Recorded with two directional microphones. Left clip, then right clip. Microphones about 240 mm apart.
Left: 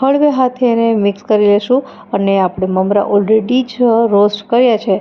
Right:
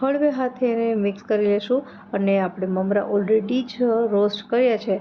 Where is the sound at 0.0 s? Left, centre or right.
Left.